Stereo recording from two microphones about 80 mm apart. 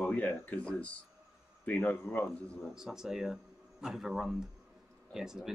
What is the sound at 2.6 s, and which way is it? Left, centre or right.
Speech, centre.